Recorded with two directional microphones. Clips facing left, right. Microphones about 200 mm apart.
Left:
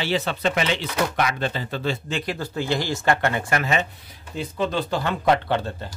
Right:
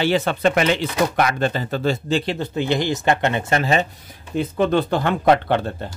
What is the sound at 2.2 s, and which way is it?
Speech, 25° right (ahead or behind).